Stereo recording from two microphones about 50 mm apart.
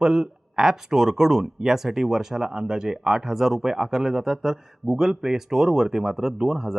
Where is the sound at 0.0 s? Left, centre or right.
Centre.